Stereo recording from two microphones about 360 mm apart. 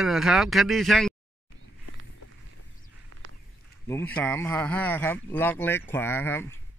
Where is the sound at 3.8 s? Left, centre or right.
Centre.